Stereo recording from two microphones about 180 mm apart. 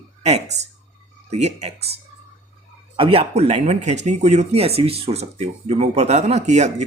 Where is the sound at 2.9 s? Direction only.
30° right (ahead or behind).